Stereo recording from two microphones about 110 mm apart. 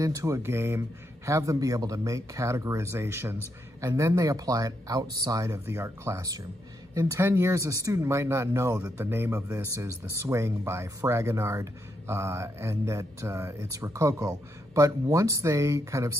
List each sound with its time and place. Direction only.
0.0 s speech: 30° right (ahead or behind)